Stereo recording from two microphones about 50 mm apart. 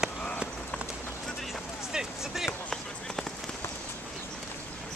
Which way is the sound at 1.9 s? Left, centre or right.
Centre.